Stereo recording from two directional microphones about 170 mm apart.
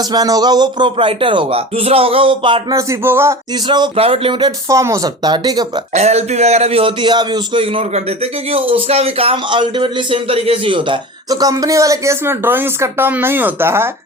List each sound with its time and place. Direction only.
0.1 s a man's voice: 20° right (ahead or behind)
3.7 s a man's voice: 30° right (ahead or behind)
5.9 s a man's voice: 40° right (ahead or behind); by 13.9 s 15° right (ahead or behind)